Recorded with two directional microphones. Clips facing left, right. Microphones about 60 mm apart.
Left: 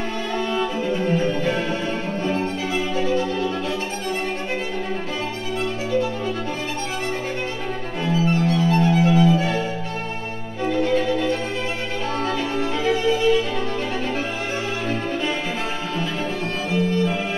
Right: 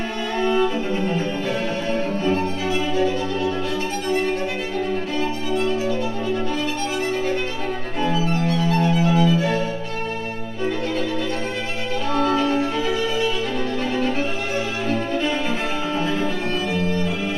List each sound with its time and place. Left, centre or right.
1.4 s music: left
8.5 s music: left
12.1 s music: right
14.9 s violin: left